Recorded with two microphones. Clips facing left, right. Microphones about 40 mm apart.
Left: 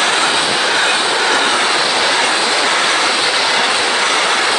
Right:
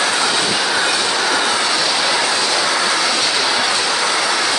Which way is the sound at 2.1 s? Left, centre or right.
Left.